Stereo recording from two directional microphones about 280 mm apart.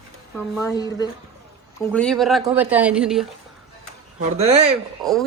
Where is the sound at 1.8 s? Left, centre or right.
Centre.